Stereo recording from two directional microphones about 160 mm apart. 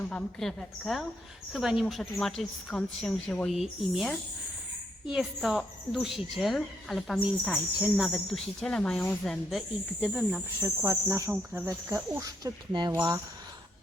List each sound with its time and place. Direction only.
0.1 s speech: 5° left (ahead or behind)
10.6 s speech: 20° right (ahead or behind)
12.9 s speech: 15° right (ahead or behind)